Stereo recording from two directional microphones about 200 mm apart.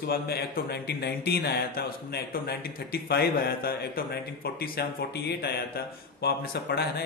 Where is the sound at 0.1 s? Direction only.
50° left (ahead or behind).